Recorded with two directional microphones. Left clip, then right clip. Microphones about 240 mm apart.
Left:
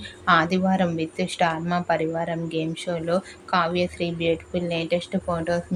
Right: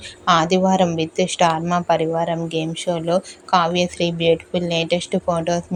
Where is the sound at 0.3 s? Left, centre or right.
Centre.